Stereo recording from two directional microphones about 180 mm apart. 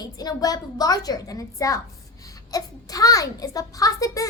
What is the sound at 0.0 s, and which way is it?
A child's voice, 20° left (ahead or behind).